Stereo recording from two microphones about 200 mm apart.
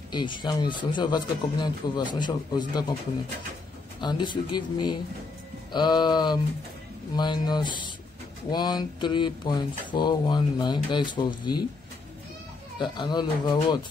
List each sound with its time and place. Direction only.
0.1 s speech: 25° left (ahead or behind)
4.0 s speech: 20° left (ahead or behind)
12.7 s speech: 25° left (ahead or behind)